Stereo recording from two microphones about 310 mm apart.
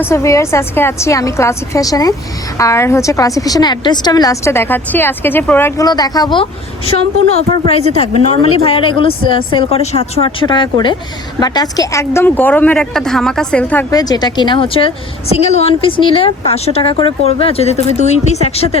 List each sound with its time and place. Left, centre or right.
0.0 s a woman's voice: centre